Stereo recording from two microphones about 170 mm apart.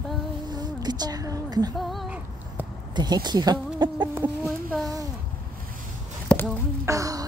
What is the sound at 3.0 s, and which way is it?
Speech, 25° right (ahead or behind).